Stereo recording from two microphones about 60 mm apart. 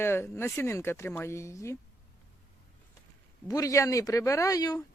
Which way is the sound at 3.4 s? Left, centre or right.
Left.